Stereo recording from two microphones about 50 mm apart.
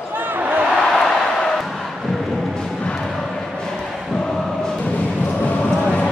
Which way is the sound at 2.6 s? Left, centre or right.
Centre.